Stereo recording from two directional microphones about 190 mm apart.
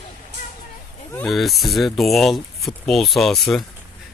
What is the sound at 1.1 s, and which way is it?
Speech, centre (ahead or behind).